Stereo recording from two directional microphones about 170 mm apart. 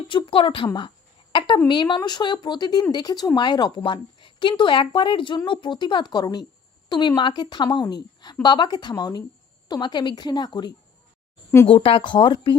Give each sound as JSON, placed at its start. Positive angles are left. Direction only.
{"t": 0.1, "sound": "a woman's voice", "side_deg": 30}
{"t": 11.7, "sound": "a woman's voice", "side_deg": 30}